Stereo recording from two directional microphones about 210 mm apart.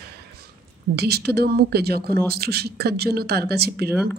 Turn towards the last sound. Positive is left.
turn(degrees=-50)  # may be behind; listen again after turning